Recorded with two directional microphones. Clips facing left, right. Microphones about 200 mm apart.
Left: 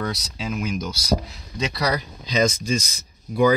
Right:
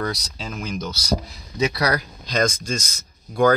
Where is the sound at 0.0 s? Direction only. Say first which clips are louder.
Even; 5° left (ahead or behind).